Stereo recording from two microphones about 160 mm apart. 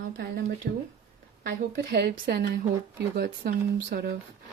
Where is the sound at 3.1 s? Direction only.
75° right (ahead or behind).